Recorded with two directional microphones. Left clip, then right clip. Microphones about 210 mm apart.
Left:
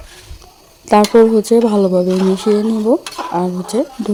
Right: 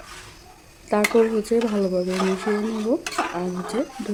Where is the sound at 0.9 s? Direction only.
35° left (ahead or behind).